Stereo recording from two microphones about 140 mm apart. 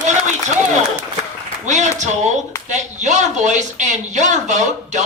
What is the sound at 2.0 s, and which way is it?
Speech, 55° right (ahead or behind).